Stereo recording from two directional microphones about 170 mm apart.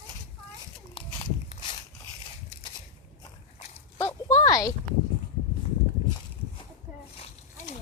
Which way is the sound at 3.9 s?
20° left (ahead or behind).